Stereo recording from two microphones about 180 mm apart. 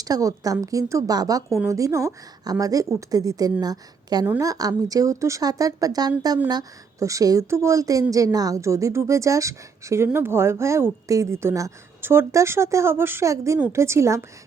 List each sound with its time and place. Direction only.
0.0 s a woman's voice: 20° right (ahead or behind)